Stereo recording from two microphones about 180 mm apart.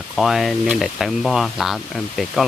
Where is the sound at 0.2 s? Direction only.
Centre (ahead or behind).